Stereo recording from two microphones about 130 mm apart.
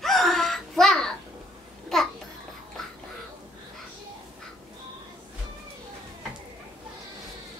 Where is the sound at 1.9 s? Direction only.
Centre (ahead or behind).